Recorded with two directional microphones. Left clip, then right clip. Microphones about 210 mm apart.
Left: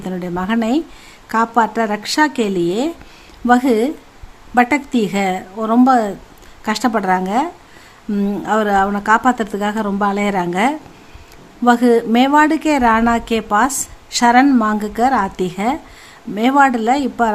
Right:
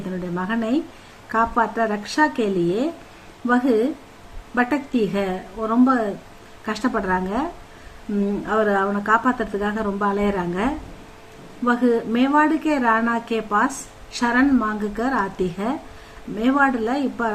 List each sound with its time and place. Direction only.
0.3 s speech: 55° left (ahead or behind)
8.4 s speech: 55° left (ahead or behind)